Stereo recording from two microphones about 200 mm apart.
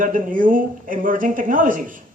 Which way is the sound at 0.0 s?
40° right (ahead or behind).